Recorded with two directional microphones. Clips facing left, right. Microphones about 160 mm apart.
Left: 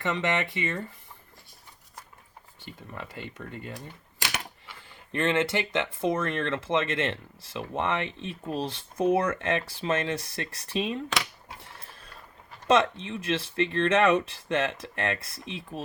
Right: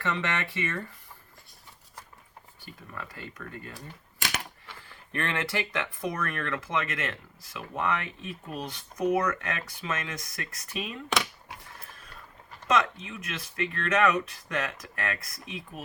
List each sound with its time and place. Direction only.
0.0 s speech: 20° left (ahead or behind)
2.6 s speech: 20° left (ahead or behind)
4.9 s speech: 20° left (ahead or behind)
12.6 s speech: 30° left (ahead or behind)